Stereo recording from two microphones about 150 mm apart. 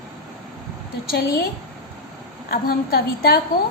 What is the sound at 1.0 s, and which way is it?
Speech, 90° left.